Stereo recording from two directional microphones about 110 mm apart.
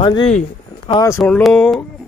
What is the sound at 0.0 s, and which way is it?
Speech, 50° left (ahead or behind).